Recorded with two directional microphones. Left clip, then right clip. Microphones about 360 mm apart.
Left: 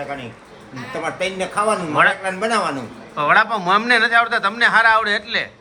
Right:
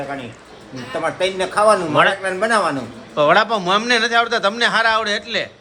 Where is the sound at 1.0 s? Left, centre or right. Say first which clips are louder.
Right 3 dB; centre.